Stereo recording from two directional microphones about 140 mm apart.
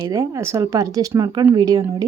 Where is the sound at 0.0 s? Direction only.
25° right (ahead or behind).